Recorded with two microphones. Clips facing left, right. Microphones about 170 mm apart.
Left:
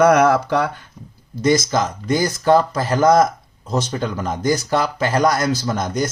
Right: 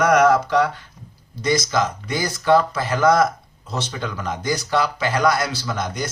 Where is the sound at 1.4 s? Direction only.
45° left (ahead or behind).